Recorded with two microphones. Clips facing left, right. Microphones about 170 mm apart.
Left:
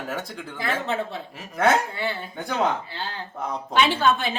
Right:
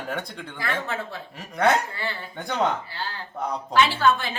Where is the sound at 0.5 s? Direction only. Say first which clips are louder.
Left 3 dB; 20° left (ahead or behind).